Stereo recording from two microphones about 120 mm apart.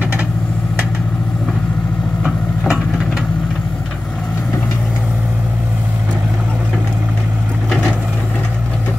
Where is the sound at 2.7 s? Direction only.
5° right (ahead or behind).